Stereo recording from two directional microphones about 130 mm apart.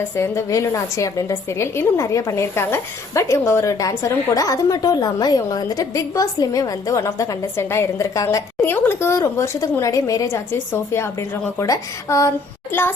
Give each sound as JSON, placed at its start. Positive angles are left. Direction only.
{"t": 0.2, "sound": "a woman's voice", "side_deg": 20}